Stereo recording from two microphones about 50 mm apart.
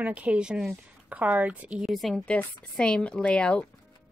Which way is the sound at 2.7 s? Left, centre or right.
Centre.